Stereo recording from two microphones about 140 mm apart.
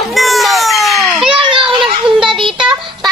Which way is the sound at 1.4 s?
35° right (ahead or behind).